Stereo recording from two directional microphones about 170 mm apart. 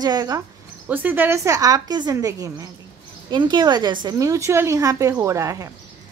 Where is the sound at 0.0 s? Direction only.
25° right (ahead or behind).